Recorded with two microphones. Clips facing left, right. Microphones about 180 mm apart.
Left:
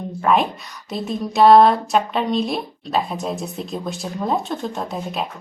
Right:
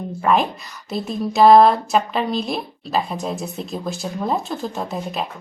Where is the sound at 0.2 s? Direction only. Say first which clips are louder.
Even; centre (ahead or behind).